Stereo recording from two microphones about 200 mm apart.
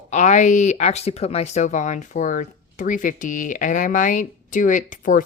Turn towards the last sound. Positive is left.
turn(degrees=40)  # may be behind; listen again after turning